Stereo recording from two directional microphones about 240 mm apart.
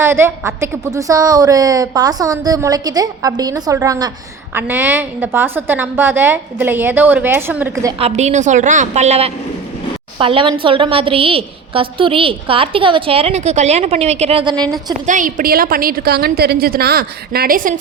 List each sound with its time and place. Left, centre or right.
0.0 s a woman's voice: centre
7.9 s a woman's voice: right
15.0 s a woman's voice: right